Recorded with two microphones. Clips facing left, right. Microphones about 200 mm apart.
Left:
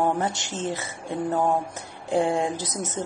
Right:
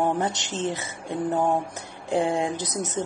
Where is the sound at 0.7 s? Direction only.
20° right (ahead or behind).